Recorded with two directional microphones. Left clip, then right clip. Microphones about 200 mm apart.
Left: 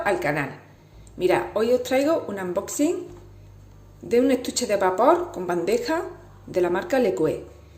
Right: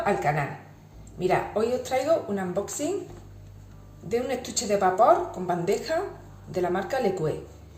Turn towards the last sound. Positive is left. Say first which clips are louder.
# left 5 dB
turn(degrees=45)  # may be behind; listen again after turning